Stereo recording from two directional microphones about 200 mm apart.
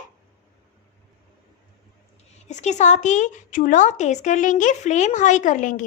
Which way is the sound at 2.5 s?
35° left (ahead or behind).